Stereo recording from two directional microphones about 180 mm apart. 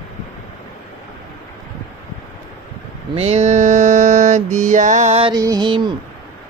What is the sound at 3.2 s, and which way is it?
Mantra, 40° right (ahead or behind).